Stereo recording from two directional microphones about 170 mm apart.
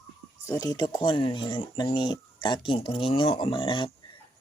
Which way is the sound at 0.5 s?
20° left (ahead or behind).